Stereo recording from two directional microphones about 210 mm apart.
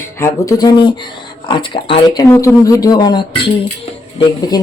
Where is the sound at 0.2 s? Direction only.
15° left (ahead or behind).